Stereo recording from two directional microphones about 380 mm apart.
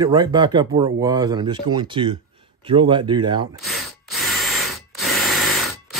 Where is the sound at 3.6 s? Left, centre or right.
Centre.